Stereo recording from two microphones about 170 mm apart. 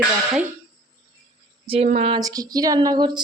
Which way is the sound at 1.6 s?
35° right (ahead or behind).